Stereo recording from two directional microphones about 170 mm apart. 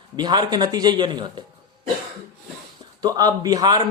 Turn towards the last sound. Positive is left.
turn(degrees=-25)  # may be behind; listen again after turning